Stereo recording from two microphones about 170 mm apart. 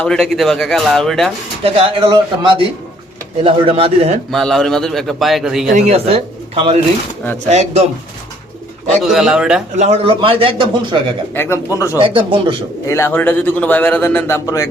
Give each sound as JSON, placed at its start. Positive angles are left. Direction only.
{"t": 0.0, "sound": "a man's voice", "side_deg": 5}
{"t": 1.6, "sound": "speech", "side_deg": -30}
{"t": 4.3, "sound": "a man's voice", "side_deg": 0}
{"t": 5.7, "sound": "speech", "side_deg": -40}
{"t": 9.0, "sound": "a man's voice", "side_deg": 0}
{"t": 9.7, "sound": "speech", "side_deg": -40}
{"t": 11.3, "sound": "a man's voice", "side_deg": 15}
{"t": 11.9, "sound": "speech", "side_deg": -30}
{"t": 12.9, "sound": "a man's voice", "side_deg": 15}